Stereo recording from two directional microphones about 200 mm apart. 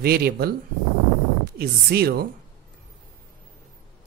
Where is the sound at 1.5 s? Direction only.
50° right (ahead or behind).